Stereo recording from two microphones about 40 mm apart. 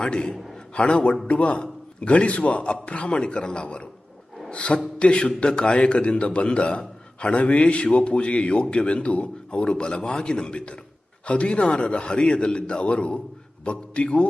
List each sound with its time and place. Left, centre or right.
0.0 s a man's voice: left